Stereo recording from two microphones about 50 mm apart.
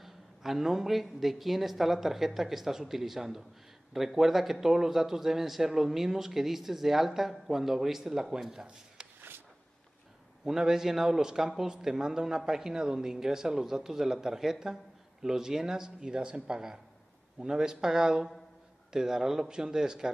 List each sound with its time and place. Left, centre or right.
0.0 s a man's voice: centre
10.4 s speech: centre